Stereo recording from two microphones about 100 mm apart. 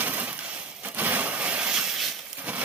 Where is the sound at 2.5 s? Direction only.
15° right (ahead or behind).